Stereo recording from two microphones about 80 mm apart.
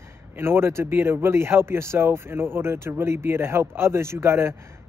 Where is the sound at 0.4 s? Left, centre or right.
Right.